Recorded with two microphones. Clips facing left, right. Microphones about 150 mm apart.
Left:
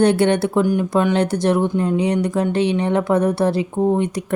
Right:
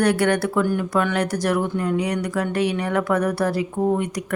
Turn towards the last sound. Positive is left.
turn(degrees=20)  # may be behind; listen again after turning